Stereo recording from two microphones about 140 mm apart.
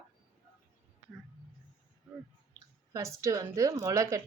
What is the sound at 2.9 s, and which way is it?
Speech, 20° right (ahead or behind).